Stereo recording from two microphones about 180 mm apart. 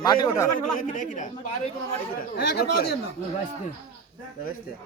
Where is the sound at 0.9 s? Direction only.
45° left (ahead or behind).